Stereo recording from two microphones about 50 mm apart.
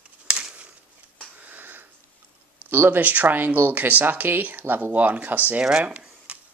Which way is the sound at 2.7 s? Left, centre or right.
Right.